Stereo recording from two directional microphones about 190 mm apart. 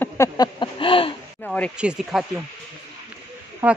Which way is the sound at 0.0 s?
20° left (ahead or behind).